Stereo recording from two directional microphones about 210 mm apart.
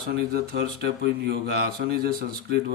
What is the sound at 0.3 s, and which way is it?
Speech, 50° right (ahead or behind).